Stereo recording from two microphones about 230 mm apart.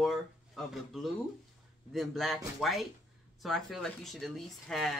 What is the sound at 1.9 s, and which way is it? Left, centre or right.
Speech, centre.